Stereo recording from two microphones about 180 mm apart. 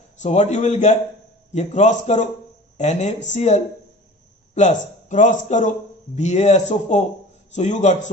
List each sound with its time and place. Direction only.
0.2 s a man's voice: 40° left (ahead or behind)